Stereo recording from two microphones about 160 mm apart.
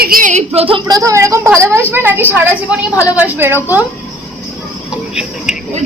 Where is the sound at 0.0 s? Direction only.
60° right (ahead or behind).